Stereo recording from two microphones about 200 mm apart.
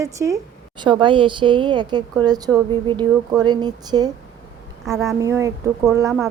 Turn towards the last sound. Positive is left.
turn(degrees=-15)  # may be behind; listen again after turning